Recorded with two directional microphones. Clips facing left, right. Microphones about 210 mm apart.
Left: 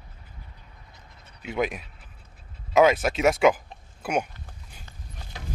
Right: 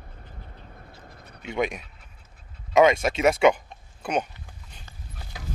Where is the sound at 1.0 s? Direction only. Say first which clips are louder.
Right 5 dB; 55° right (ahead or behind).